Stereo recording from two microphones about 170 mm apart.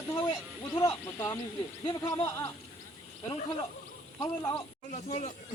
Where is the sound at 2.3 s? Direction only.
15° left (ahead or behind).